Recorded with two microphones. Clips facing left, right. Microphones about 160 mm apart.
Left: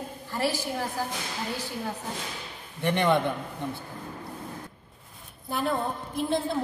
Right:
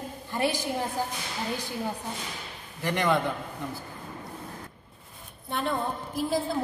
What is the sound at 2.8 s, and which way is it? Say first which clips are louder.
Speech: left 2 dB; 25° left (ahead or behind).